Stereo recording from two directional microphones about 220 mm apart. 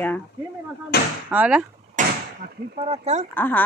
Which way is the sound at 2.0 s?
35° right (ahead or behind).